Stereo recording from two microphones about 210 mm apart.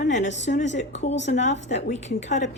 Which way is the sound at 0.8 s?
30° left (ahead or behind).